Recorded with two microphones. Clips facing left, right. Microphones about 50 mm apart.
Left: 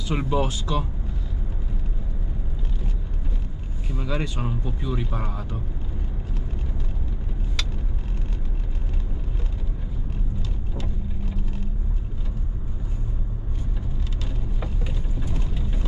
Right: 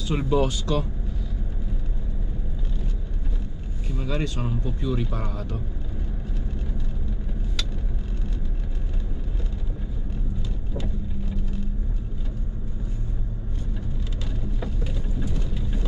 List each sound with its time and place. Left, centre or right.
0.1 s speech: centre
3.9 s speech: centre
14.6 s vehicle: centre